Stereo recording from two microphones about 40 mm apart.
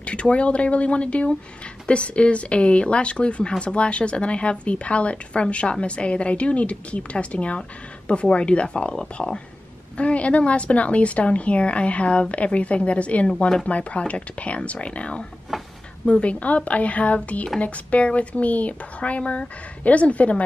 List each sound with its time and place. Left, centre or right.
0.0 s speech: left
9.9 s speech: left
15.5 s a sound: centre
16.1 s speech: left